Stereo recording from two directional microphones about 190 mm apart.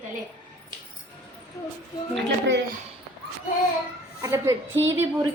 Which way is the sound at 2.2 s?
70° right (ahead or behind).